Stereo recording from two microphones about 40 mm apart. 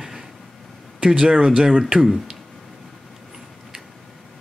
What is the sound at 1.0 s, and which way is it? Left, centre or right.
Speech, right.